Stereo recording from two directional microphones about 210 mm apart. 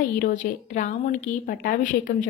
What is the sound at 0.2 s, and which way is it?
Speech, 40° left (ahead or behind).